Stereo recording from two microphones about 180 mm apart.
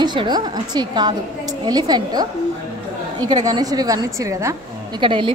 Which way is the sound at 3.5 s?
20° right (ahead or behind).